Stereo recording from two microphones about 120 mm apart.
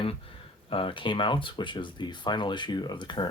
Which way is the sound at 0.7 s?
45° left (ahead or behind).